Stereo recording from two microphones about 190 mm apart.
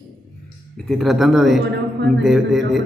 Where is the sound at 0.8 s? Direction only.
Centre (ahead or behind).